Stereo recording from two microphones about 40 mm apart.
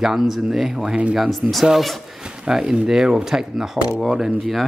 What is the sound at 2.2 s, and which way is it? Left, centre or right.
Speech, centre.